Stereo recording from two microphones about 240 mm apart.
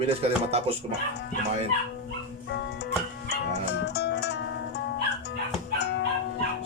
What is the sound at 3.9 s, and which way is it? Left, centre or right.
Music, left.